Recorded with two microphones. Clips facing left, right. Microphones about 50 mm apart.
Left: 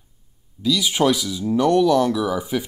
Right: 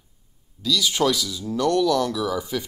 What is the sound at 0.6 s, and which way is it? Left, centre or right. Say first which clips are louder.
Speech: left 3 dB; centre.